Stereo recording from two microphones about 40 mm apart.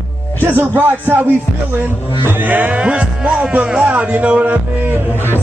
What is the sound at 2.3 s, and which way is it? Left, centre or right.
Music, right.